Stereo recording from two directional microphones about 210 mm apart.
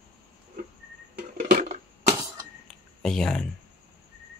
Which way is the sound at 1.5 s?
35° right (ahead or behind).